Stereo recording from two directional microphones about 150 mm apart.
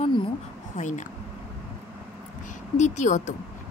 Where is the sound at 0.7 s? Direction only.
55° left (ahead or behind).